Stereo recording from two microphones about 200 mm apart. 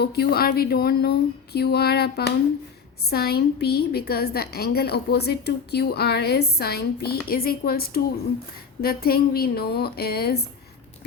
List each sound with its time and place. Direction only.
0.0 s a woman's voice: 50° left (ahead or behind)